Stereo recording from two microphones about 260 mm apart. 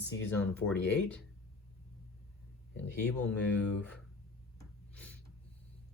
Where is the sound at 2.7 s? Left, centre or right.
Left.